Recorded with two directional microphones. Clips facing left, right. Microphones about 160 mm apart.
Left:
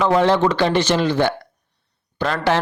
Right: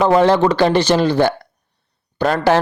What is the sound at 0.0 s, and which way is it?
A man's voice, 40° right (ahead or behind).